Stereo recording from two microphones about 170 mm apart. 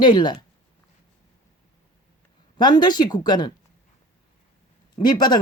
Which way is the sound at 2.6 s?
25° left (ahead or behind).